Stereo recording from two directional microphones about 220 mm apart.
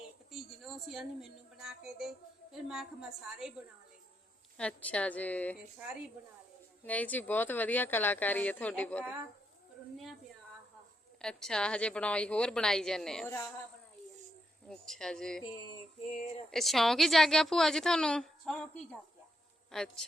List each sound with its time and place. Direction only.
0.3 s a woman's voice: centre (ahead or behind)
4.5 s speech: 5° left (ahead or behind)
6.8 s speech: 5° left (ahead or behind)
11.2 s a woman's voice: 5° left (ahead or behind)
14.7 s a woman's voice: centre (ahead or behind)
15.7 s a sound: 25° left (ahead or behind)
16.5 s a woman's voice: centre (ahead or behind)